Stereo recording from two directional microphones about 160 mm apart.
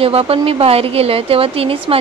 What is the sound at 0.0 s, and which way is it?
A woman's voice, 35° right (ahead or behind).